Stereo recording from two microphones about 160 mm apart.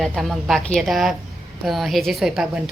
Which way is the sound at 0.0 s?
Centre (ahead or behind).